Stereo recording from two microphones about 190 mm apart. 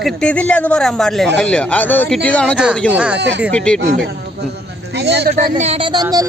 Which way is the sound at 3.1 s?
70° right (ahead or behind).